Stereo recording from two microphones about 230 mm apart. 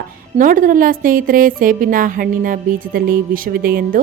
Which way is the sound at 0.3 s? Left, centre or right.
Right.